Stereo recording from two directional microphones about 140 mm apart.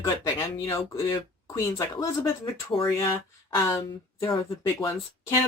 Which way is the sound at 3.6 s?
20° left (ahead or behind).